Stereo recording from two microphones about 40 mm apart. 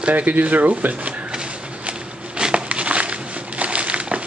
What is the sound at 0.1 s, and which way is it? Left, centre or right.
Speech, right.